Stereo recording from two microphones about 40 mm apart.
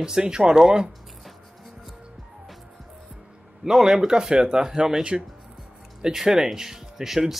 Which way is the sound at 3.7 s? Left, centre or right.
Centre.